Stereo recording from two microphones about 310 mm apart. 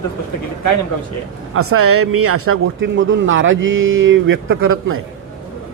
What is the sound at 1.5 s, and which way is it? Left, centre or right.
Speech, right.